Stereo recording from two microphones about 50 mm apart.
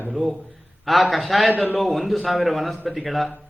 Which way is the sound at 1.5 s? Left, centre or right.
Left.